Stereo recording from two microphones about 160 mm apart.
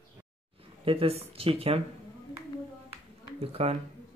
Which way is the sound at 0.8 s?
35° right (ahead or behind).